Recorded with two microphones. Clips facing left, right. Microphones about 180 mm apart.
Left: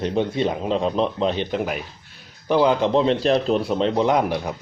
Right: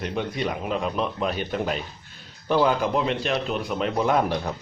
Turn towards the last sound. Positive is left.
turn(degrees=10)  # may be behind; listen again after turning